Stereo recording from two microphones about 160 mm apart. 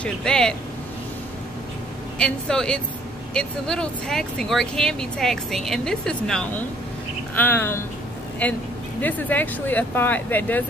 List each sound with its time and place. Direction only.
0.0 s speech: 5° left (ahead or behind)
2.1 s speech: 5° left (ahead or behind)